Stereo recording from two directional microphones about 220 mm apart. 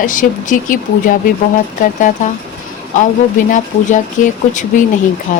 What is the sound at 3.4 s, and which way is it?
Speech, 35° left (ahead or behind).